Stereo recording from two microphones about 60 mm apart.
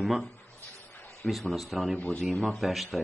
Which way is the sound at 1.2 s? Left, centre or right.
Centre.